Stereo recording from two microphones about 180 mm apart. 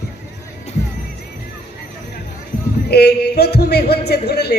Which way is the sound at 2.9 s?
65° left (ahead or behind).